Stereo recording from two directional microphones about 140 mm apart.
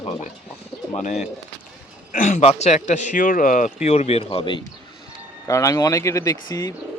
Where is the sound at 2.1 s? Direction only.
60° left (ahead or behind).